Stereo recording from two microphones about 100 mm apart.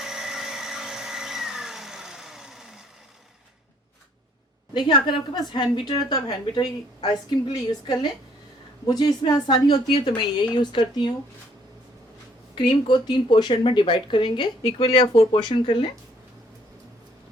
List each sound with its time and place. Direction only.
0.0 s vacuum cleaner: 5° right (ahead or behind)
4.7 s speech: 50° left (ahead or behind)
12.5 s speech: 50° left (ahead or behind)
15.1 s speech: 90° left
15.4 s speech: 50° left (ahead or behind)